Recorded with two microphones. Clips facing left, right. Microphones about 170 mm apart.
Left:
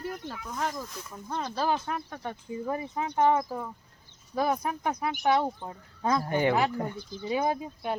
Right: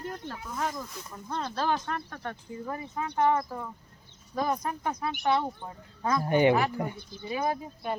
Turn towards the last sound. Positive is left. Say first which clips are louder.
# left 2 dB
turn(degrees=20)  # may be behind; listen again after turning